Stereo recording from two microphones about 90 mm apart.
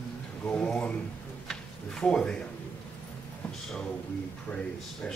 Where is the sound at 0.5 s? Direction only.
10° left (ahead or behind).